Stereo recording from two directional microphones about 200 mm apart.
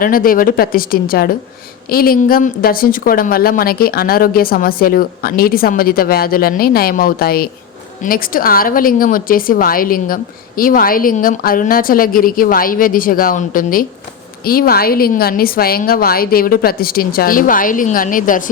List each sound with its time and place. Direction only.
0.0 s a woman's voice: 45° left (ahead or behind)